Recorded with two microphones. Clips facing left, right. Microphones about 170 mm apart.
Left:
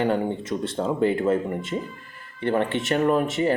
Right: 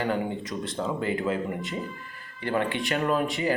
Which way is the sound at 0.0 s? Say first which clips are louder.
Left 4 dB; 25° left (ahead or behind).